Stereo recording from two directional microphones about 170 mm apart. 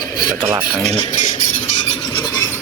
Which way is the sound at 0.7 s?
5° left (ahead or behind).